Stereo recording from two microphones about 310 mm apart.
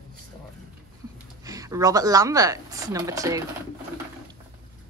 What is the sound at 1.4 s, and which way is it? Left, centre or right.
Speech, centre.